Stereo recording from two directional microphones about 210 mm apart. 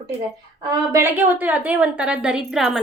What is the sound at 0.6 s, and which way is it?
A woman's voice, 15° right (ahead or behind).